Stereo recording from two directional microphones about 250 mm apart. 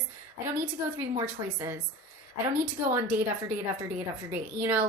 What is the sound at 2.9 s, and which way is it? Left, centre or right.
Speech, centre.